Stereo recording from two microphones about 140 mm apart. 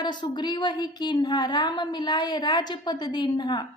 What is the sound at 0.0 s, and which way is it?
A woman's voice, 30° left (ahead or behind).